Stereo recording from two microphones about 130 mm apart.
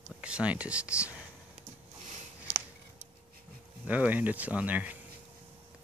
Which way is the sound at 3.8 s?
10° right (ahead or behind).